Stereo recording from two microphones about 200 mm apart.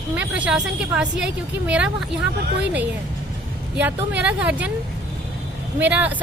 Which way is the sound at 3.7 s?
5° right (ahead or behind).